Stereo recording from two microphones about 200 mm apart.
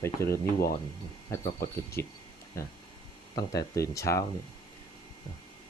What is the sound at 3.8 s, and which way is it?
Speech, 15° left (ahead or behind).